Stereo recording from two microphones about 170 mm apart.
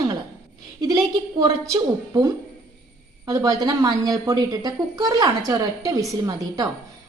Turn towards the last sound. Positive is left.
turn(degrees=-20)  # may be behind; listen again after turning